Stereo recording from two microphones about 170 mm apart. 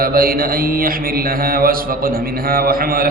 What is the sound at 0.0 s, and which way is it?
A man's voice, 60° right (ahead or behind).